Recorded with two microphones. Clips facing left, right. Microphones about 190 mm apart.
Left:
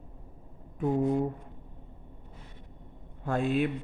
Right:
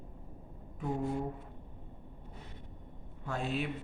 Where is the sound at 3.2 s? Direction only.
55° left (ahead or behind).